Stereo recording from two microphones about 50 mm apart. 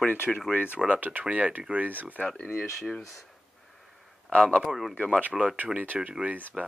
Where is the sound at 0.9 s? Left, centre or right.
Right.